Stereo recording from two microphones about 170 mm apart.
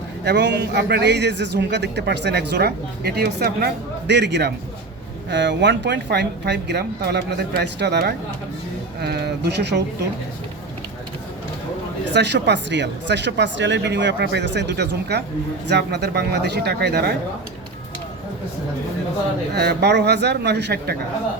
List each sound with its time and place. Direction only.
0.3 s a man's voice: 90° right
12.1 s a woman's voice: 90° right
19.5 s a man's voice: 80° right